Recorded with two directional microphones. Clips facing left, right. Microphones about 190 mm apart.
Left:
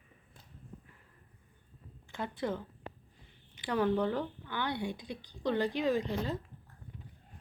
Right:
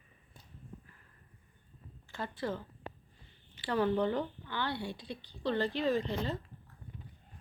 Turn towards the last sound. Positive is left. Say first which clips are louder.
# left 1 dB
turn(degrees=10)  # may be behind; listen again after turning